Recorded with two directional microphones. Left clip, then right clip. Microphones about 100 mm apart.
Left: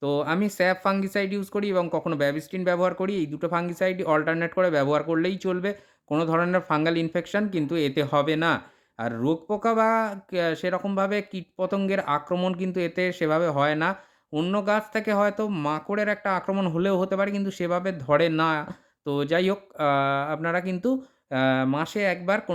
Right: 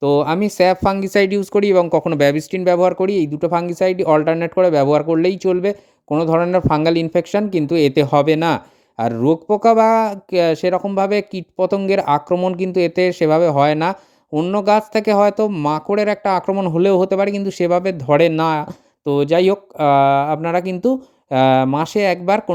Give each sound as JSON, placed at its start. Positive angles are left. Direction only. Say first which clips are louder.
{"t": 0.0, "sound": "speech", "louder": "right 10 dB", "side_deg": -50}
{"t": 1.1, "sound": "speech", "louder": "right 12 dB", "side_deg": -80}
{"t": 2.6, "sound": "speech", "louder": "right 9 dB", "side_deg": -45}
{"t": 6.7, "sound": "speech", "louder": "right 8 dB", "side_deg": -50}
{"t": 12.3, "sound": "speech", "louder": "right 9 dB", "side_deg": -35}
{"t": 12.5, "sound": "speech", "louder": "right 10 dB", "side_deg": -50}
{"t": 19.0, "sound": "speech", "louder": "right 10 dB", "side_deg": -45}
{"t": 21.2, "sound": "speech", "louder": "right 10 dB", "side_deg": -65}